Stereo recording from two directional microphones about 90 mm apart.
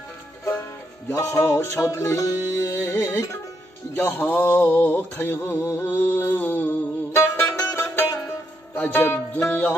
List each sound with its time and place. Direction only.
1.0 s music: 30° left (ahead or behind)
3.9 s mantra: 20° left (ahead or behind)
8.7 s music: 20° left (ahead or behind)